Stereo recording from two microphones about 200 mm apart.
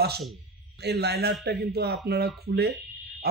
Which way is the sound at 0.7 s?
55° right (ahead or behind).